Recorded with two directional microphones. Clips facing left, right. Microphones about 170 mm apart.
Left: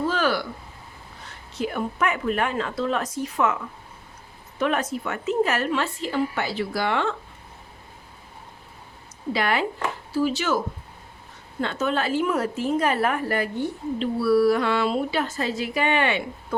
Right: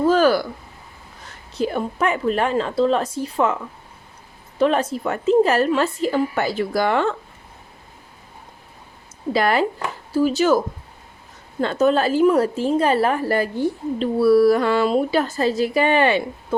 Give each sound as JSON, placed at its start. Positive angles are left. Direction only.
{"t": 0.0, "sound": "a sound", "side_deg": -40}
{"t": 1.5, "sound": "a woman's voice", "side_deg": -30}
{"t": 9.3, "sound": "a woman's voice", "side_deg": -40}
{"t": 11.6, "sound": "a woman's voice", "side_deg": -40}
{"t": 16.5, "sound": "speech", "side_deg": -25}